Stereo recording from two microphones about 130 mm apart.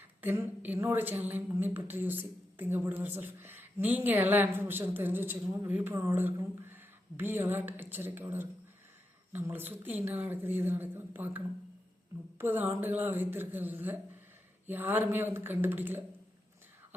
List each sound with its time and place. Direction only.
0.2 s a woman's voice: 15° right (ahead or behind)